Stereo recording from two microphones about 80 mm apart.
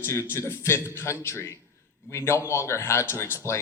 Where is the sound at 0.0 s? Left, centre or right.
Left.